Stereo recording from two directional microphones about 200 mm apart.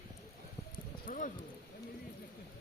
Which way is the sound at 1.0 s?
40° left (ahead or behind).